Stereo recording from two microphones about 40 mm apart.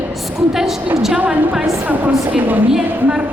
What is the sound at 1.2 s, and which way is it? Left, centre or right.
A woman's voice, right.